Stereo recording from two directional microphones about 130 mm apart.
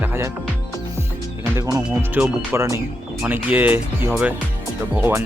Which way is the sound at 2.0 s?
15° right (ahead or behind).